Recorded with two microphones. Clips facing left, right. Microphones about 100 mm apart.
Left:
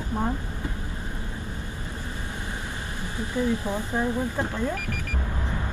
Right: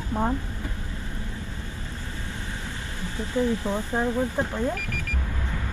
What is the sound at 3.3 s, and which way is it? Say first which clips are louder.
Speech: right 1 dB; 15° left (ahead or behind).